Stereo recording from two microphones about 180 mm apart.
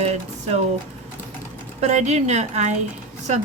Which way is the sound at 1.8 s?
40° right (ahead or behind).